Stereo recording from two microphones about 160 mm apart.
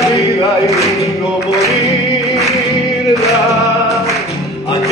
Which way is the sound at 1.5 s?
20° left (ahead or behind).